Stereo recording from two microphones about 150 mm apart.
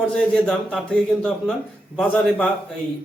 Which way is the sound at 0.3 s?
5° left (ahead or behind).